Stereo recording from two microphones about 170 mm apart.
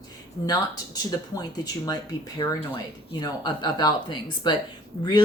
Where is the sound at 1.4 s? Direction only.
25° left (ahead or behind).